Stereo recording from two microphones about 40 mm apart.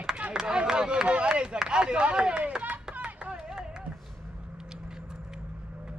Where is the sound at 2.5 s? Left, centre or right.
Right.